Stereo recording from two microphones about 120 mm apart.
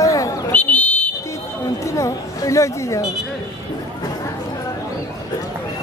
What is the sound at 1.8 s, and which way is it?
Chatter, 25° left (ahead or behind).